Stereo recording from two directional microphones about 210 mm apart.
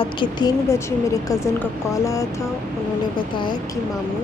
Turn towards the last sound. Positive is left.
turn(degrees=20)  # may be behind; listen again after turning